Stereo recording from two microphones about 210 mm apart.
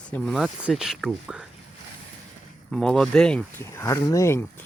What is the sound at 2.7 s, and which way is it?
Speech, 5° left (ahead or behind).